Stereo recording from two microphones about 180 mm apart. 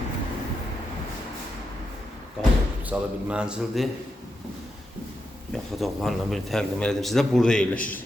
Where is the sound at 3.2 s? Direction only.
5° right (ahead or behind).